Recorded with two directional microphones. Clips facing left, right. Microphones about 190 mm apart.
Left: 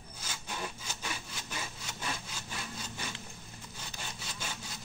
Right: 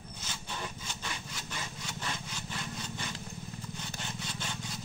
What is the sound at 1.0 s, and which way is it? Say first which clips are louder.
Sawing: left 1 dB; 10° left (ahead or behind).